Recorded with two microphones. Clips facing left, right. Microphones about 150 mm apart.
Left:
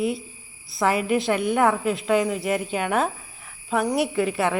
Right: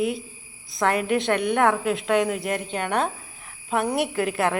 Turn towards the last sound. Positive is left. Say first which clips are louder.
# left 1 dB
turn(degrees=0)  # may be behind; listen again after turning